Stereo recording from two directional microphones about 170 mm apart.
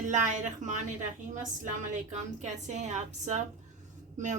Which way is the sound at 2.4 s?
45° right (ahead or behind).